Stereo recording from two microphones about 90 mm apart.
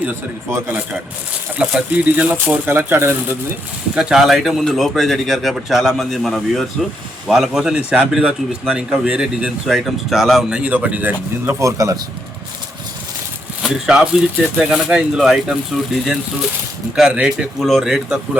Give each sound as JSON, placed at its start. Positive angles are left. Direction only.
{"t": 1.5, "sound": "speech", "side_deg": -15}
{"t": 3.9, "sound": "a man's voice", "side_deg": -5}
{"t": 10.6, "sound": "a man's voice", "side_deg": -15}
{"t": 11.6, "sound": "speech", "side_deg": -40}
{"t": 13.6, "sound": "a man's voice", "side_deg": -5}